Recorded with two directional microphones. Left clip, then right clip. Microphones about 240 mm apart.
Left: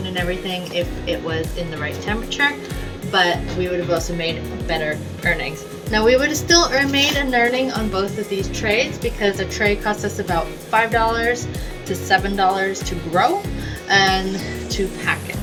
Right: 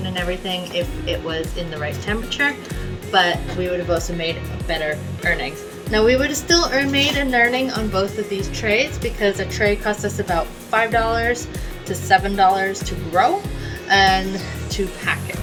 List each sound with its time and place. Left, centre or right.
0.1 s a woman's voice: centre
5.9 s a woman's voice: centre
13.8 s a woman's voice: centre